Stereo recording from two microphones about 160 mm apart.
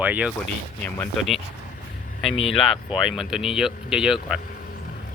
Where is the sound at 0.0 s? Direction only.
10° right (ahead or behind).